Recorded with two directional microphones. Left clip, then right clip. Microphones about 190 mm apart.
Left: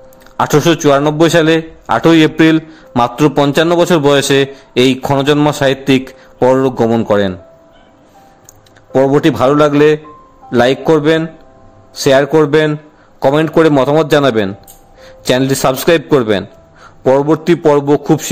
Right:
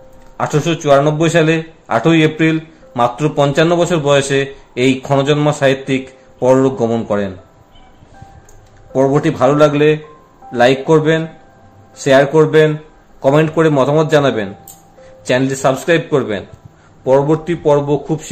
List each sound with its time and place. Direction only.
0.4 s a man's voice: 50° left (ahead or behind)
8.9 s a man's voice: 40° left (ahead or behind)